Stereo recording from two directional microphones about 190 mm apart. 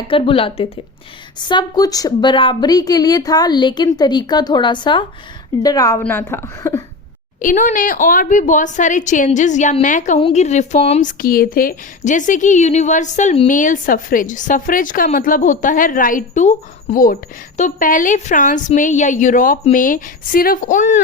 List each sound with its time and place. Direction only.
0.1 s a woman's voice: 30° left (ahead or behind)
7.4 s a woman's voice: 40° left (ahead or behind)
11.2 s a woman's voice: 50° left (ahead or behind)